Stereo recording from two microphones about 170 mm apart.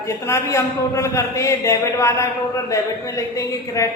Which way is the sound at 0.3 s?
15° left (ahead or behind).